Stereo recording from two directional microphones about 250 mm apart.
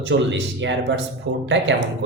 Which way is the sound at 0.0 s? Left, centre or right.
Right.